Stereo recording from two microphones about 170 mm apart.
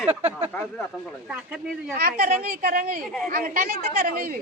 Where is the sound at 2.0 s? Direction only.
60° right (ahead or behind).